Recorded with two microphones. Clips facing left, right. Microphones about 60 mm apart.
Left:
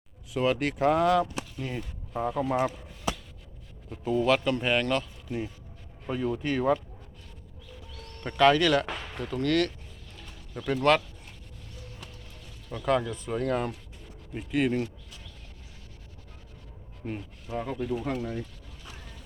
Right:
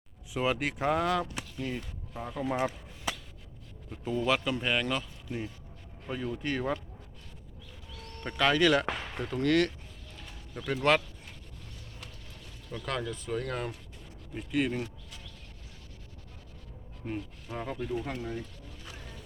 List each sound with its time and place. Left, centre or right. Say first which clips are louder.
0.3 s speech: left 4 dB; centre
3.8 s speech: left 5 dB; centre
8.2 s speech: left 6 dB; centre
8.6 s speech: even; centre
10.2 s a sound: left 2 dB; centre
12.7 s speech: left 8 dB; centre
17.0 s speech: even; centre